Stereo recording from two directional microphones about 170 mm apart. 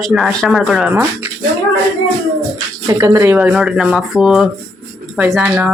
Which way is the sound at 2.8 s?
20° right (ahead or behind).